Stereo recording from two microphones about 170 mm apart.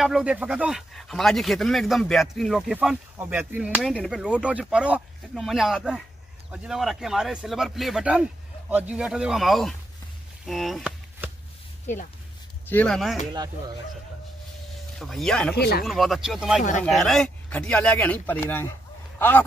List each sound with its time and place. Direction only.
0.0 s speech: 5° right (ahead or behind)
11.2 s a sound: 10° right (ahead or behind)
12.6 s speech: 10° left (ahead or behind)
13.3 s speech: 25° right (ahead or behind)
15.0 s speech: centre (ahead or behind)
15.5 s speech: 70° left (ahead or behind)
15.8 s speech: centre (ahead or behind)